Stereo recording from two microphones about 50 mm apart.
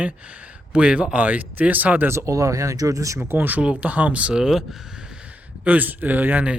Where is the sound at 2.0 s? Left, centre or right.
Right.